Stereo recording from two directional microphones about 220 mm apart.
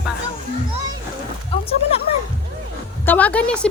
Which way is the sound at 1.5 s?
25° left (ahead or behind).